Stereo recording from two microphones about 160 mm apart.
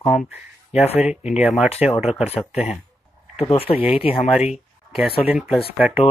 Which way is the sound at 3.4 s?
35° left (ahead or behind).